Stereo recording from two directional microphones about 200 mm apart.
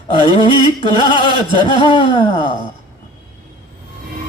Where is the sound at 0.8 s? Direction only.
25° left (ahead or behind).